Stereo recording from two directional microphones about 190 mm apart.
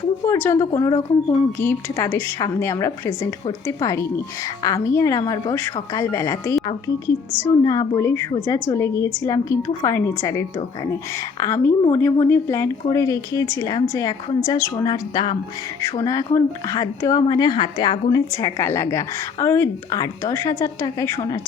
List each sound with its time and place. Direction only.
0.3 s a woman's voice: 10° left (ahead or behind)